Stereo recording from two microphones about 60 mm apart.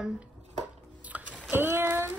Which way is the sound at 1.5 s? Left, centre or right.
Right.